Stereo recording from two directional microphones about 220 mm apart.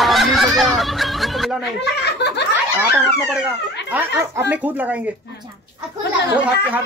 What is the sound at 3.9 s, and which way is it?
Speech, 5° right (ahead or behind).